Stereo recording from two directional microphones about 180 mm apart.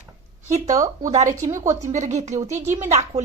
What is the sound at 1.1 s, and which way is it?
A woman's voice, 40° right (ahead or behind).